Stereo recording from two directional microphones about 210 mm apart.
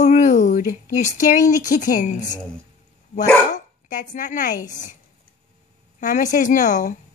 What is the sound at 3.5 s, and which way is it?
Speech, 35° left (ahead or behind).